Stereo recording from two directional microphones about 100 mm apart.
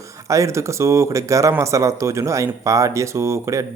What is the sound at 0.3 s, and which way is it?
Speech, 30° right (ahead or behind).